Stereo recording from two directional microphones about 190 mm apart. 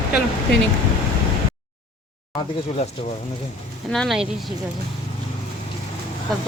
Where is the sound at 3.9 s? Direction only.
Centre (ahead or behind).